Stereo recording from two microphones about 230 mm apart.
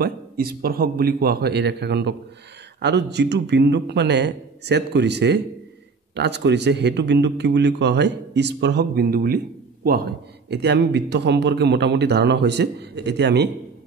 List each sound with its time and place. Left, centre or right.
0.0 s a man's voice: right